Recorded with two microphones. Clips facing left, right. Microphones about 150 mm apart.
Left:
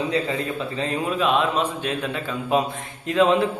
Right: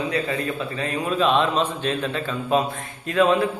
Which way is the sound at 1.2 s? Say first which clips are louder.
Right 2 dB; 5° left (ahead or behind).